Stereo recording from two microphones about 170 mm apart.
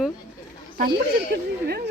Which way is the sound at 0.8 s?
70° right (ahead or behind).